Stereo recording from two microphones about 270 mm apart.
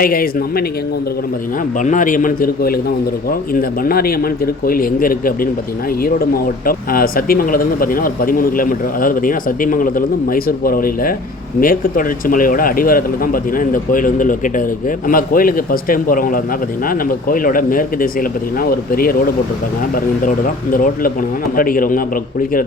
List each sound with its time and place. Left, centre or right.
0.0 s speech: left
1.8 s a man's voice: left
6.7 s speech: left
20.7 s speech: left